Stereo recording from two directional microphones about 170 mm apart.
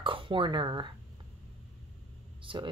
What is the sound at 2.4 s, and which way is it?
Speech, 30° right (ahead or behind).